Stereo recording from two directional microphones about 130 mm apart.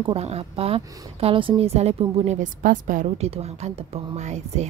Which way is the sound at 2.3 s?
85° right.